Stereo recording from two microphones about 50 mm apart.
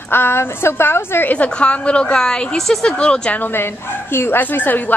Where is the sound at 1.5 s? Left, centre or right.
Left.